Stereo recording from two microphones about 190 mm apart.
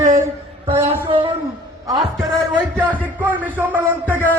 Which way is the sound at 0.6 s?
30° right (ahead or behind).